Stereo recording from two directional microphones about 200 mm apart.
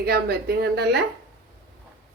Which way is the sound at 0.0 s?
50° right (ahead or behind).